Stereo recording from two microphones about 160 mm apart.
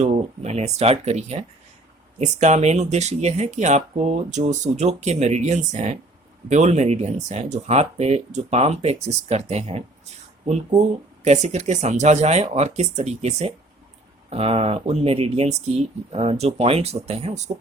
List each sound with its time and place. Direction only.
0.0 s speech: 40° right (ahead or behind)
11.2 s speech: 45° right (ahead or behind)